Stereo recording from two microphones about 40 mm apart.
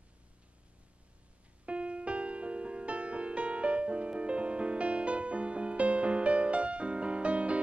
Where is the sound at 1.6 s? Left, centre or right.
Right.